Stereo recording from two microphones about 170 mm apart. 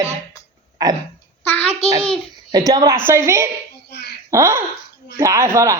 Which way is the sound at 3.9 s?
75° left (ahead or behind).